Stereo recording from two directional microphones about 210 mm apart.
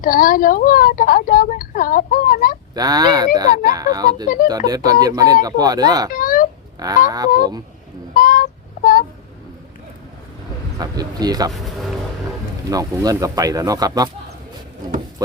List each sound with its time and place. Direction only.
0.0 s speech: 40° left (ahead or behind)
2.7 s speech: 20° right (ahead or behind)
6.1 s a sound: 40° left (ahead or behind)
6.7 s speech: 15° right (ahead or behind)
8.1 s a sound: 40° left (ahead or behind)
10.8 s speech: 20° right (ahead or behind)
12.7 s speech: 15° right (ahead or behind)